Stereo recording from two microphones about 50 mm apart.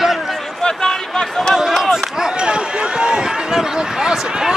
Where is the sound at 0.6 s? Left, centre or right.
Centre.